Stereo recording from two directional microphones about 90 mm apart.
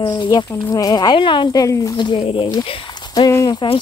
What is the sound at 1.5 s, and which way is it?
Speech, 40° left (ahead or behind).